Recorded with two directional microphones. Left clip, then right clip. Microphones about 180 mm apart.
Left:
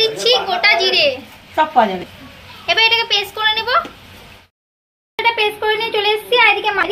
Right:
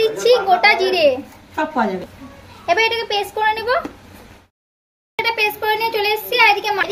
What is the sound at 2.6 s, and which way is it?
A child's voice, 35° right (ahead or behind).